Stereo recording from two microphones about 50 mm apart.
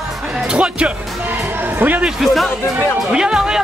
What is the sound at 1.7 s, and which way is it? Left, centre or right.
Speech, right.